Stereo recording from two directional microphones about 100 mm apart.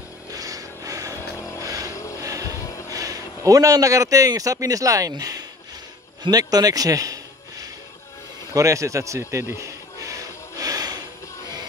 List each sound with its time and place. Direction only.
0.3 s a sound: 35° right (ahead or behind)
1.1 s vehicle: 30° left (ahead or behind)
1.6 s vehicle: 35° right (ahead or behind)
2.9 s a man's voice: 35° right (ahead or behind)
6.2 s a sound: 40° right (ahead or behind)
8.5 s speech: 30° right (ahead or behind)
9.3 s music: 30° right (ahead or behind)